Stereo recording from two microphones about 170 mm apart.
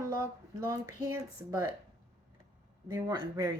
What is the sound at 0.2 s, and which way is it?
Speech, 20° right (ahead or behind).